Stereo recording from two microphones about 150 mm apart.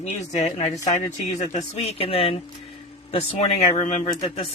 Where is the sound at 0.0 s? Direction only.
50° left (ahead or behind).